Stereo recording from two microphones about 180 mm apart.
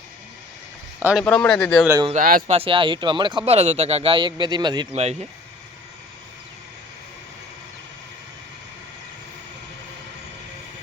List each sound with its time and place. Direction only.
0.9 s speech: 10° right (ahead or behind)
1.2 s speech: 5° left (ahead or behind)
2.2 s speech: 45° right (ahead or behind)
2.5 s speech: 30° right (ahead or behind)